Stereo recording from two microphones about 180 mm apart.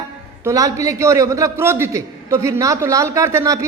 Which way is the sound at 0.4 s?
20° right (ahead or behind).